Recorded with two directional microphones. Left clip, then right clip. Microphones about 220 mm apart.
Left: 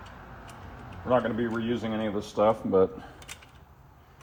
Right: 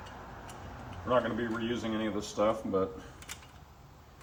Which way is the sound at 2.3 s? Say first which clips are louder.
Left 7 dB; 20° left (ahead or behind).